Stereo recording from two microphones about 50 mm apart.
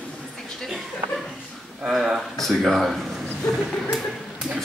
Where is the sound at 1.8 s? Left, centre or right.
Centre.